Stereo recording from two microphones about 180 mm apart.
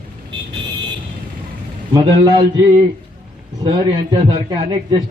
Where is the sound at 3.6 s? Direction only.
25° right (ahead or behind).